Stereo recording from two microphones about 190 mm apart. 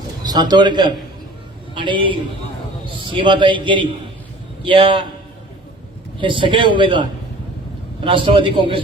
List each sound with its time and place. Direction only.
0.3 s a man's voice: 20° right (ahead or behind)
6.1 s a man's voice: 25° right (ahead or behind)